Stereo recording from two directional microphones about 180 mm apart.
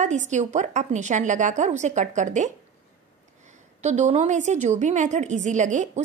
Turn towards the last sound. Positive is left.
turn(degrees=-45)  # may be behind; listen again after turning